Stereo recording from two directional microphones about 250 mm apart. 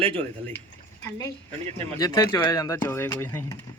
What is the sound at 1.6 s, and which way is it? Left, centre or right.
Speech, right.